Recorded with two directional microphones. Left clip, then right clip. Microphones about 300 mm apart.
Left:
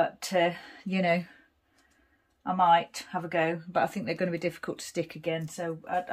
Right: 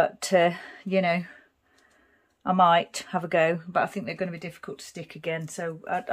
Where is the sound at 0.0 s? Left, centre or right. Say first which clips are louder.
Right 5 dB; centre.